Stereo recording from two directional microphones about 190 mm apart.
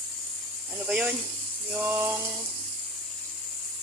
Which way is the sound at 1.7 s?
10° right (ahead or behind).